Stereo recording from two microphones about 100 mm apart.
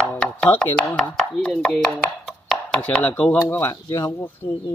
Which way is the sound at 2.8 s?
15° left (ahead or behind).